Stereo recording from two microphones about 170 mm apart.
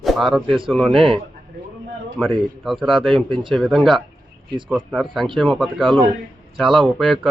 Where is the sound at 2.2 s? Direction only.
5° left (ahead or behind).